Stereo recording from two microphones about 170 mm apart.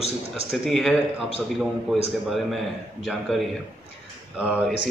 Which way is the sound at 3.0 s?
Centre (ahead or behind).